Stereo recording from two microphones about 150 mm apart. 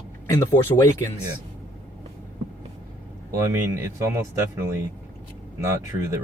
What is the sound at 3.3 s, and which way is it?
Speech, 20° right (ahead or behind).